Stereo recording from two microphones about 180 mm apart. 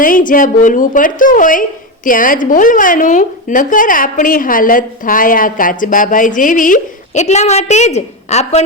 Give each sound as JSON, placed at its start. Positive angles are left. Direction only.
{"t": 0.0, "sound": "a woman's voice", "side_deg": 50}